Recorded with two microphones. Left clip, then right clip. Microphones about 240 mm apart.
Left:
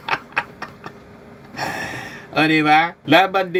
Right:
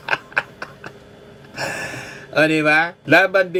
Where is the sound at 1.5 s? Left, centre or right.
Centre.